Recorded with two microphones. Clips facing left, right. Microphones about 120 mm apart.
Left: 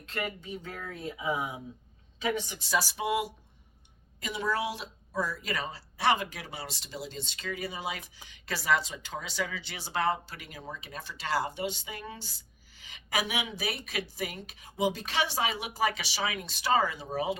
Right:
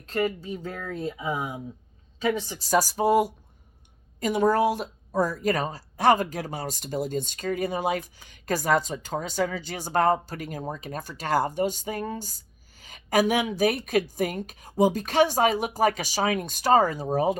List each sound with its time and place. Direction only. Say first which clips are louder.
0.0 s speech: right 9 dB; 40° right (ahead or behind)
2.5 s speech: right 7 dB; 40° right (ahead or behind)